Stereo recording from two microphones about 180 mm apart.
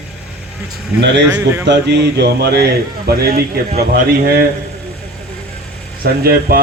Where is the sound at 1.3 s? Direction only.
15° right (ahead or behind).